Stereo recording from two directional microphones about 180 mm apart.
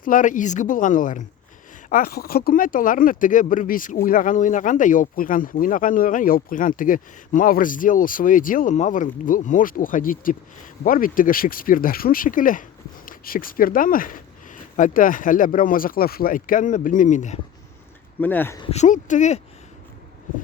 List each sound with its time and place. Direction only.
0.0 s speech: 45° left (ahead or behind)
18.2 s speech: 10° left (ahead or behind)
18.6 s speech: 40° left (ahead or behind)